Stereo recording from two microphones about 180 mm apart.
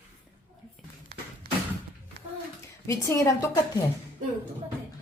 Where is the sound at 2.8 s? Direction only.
15° left (ahead or behind).